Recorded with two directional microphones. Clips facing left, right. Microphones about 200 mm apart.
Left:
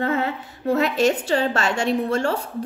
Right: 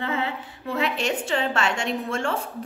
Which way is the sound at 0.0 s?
45° left (ahead or behind).